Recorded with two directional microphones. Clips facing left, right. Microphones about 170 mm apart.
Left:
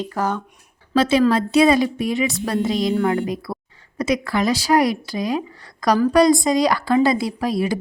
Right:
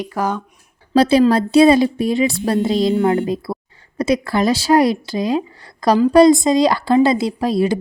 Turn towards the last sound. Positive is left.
turn(degrees=-25)  # may be behind; listen again after turning